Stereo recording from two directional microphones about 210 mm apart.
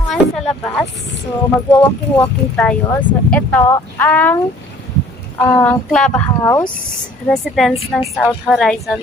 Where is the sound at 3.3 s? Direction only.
10° left (ahead or behind).